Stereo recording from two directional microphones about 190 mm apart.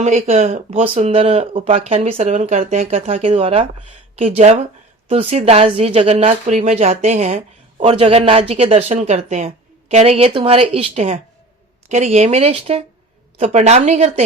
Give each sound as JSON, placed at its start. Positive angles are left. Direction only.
{"t": 0.0, "sound": "speech", "side_deg": -35}